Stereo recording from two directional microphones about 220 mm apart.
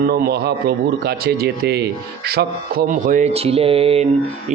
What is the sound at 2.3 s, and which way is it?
Music, 45° right (ahead or behind).